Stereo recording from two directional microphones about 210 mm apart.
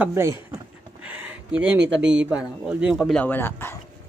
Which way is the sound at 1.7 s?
60° right (ahead or behind).